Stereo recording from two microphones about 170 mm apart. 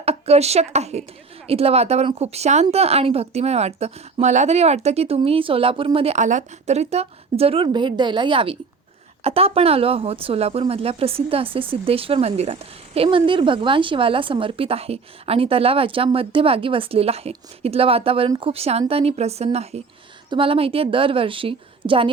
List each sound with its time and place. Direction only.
0.0 s speech: 35° right (ahead or behind)